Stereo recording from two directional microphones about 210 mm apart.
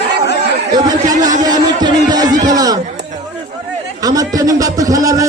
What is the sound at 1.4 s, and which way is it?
Music, 20° right (ahead or behind).